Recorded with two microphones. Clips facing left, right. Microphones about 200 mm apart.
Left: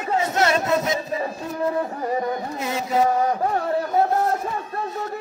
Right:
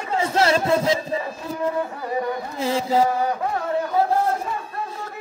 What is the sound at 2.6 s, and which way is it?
Mantra, 30° right (ahead or behind).